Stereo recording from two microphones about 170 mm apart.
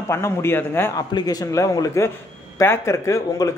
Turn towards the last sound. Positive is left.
turn(degrees=15)  # may be behind; listen again after turning